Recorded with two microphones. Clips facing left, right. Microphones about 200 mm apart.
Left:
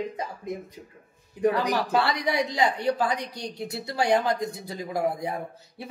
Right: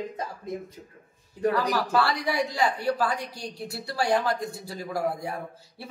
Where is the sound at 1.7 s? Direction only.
20° left (ahead or behind).